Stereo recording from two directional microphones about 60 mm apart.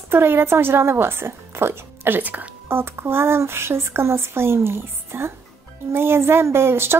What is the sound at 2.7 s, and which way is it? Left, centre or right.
Speech, right.